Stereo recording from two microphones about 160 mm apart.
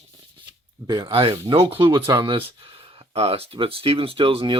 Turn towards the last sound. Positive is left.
turn(degrees=-35)  # may be behind; listen again after turning